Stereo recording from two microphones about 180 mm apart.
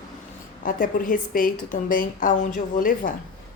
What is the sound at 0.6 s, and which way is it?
Speech, 50° left (ahead or behind).